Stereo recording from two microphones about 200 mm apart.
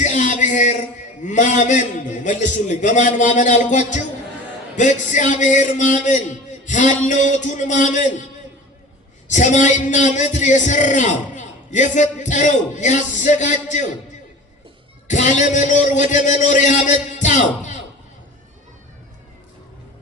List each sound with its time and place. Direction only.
0.0 s music: 40° left (ahead or behind)
1.2 s a man's voice: 40° left (ahead or behind)
9.3 s a man's voice: 40° left (ahead or behind)
15.0 s a man's voice: 40° left (ahead or behind)